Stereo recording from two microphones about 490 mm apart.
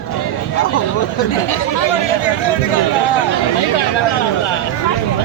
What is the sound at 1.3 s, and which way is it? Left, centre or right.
Chatter, left.